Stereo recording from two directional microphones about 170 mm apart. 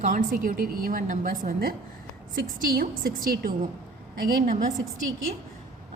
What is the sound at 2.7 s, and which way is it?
Speech, 60° right (ahead or behind).